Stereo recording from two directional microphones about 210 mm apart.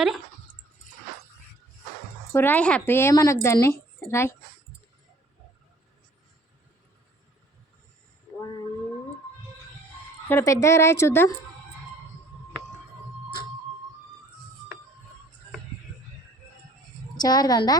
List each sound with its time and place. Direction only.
2.3 s speech: 10° left (ahead or behind)
10.2 s speech: 15° left (ahead or behind)
17.2 s speech: 20° left (ahead or behind)